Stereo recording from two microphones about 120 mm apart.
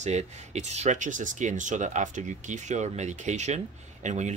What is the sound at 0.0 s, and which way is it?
Speech, 70° right (ahead or behind).